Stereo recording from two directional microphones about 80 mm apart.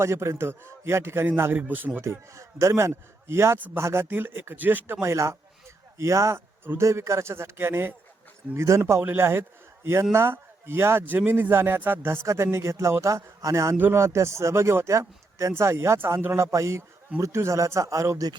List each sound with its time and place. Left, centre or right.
0.0 s a man's voice: right
2.0 s a man's voice: right
5.0 s a man's voice: right
8.5 s a man's voice: right